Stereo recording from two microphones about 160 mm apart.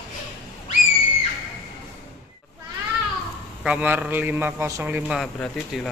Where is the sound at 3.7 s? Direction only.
10° right (ahead or behind).